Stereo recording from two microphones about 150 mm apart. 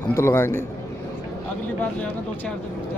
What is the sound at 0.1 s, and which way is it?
Speech, 15° left (ahead or behind).